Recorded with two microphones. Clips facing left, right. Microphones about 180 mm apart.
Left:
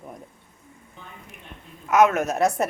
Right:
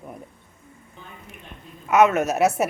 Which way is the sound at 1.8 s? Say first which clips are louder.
Right 1 dB; centre (ahead or behind).